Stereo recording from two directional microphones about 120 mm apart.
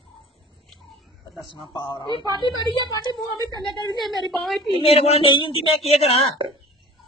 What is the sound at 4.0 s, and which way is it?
Speech, centre (ahead or behind).